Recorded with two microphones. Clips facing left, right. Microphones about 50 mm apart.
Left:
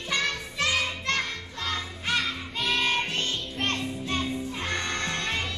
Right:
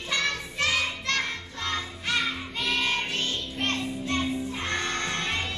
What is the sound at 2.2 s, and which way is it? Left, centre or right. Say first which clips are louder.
Music: right 2 dB; centre.